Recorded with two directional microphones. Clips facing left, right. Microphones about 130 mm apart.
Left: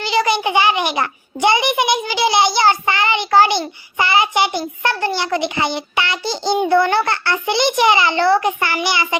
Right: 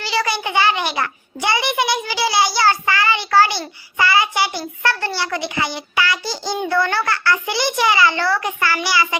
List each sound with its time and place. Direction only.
0.0 s a child's voice: 20° left (ahead or behind)